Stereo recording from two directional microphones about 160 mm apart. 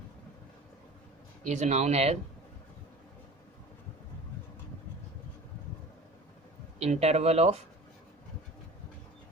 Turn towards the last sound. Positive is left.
turn(degrees=-40)  # may be behind; listen again after turning